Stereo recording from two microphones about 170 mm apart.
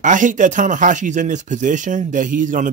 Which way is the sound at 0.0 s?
50° right (ahead or behind).